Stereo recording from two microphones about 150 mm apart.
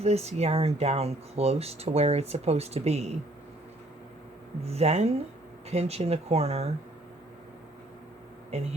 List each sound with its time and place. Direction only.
0.0 s speech: 45° right (ahead or behind)
4.6 s speech: 45° right (ahead or behind)